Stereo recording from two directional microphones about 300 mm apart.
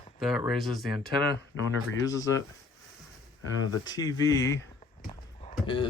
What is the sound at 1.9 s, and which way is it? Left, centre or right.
Speech, centre.